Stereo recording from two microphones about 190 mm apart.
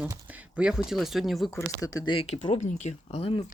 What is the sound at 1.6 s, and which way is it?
Speech, 15° left (ahead or behind).